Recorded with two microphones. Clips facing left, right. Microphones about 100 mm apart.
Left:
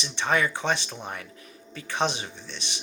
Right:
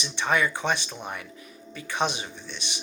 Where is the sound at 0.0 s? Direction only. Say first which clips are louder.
Even; 35° left (ahead or behind).